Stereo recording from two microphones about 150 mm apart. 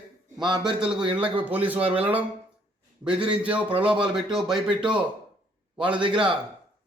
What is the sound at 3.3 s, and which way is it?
A man's voice, 10° right (ahead or behind).